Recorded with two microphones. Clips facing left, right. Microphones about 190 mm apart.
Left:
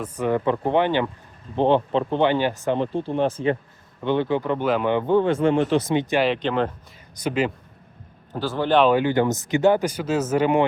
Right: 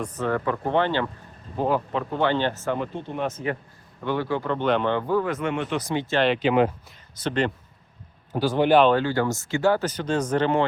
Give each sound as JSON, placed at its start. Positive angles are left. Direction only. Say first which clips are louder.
{"t": 0.0, "sound": "speech", "louder": "left 3 dB", "side_deg": 10}
{"t": 1.5, "sound": "speech", "louder": "left 5 dB", "side_deg": 25}
{"t": 2.3, "sound": "speech", "louder": "left 3 dB", "side_deg": 15}
{"t": 2.7, "sound": "speech", "louder": "left 6 dB", "side_deg": 30}
{"t": 4.6, "sound": "speech", "louder": "left 1 dB", "side_deg": 5}
{"t": 5.9, "sound": "speech", "louder": "left 3 dB", "side_deg": 15}
{"t": 6.2, "sound": "speech", "louder": "right 2 dB", "side_deg": 0}
{"t": 8.3, "sound": "speech", "louder": "right 2 dB", "side_deg": -15}
{"t": 8.8, "sound": "speech", "louder": "left 2 dB", "side_deg": 10}